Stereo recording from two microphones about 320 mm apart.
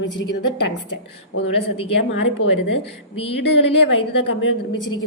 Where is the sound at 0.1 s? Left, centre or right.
Left.